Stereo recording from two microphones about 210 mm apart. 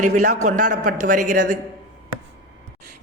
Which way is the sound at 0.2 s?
90° right.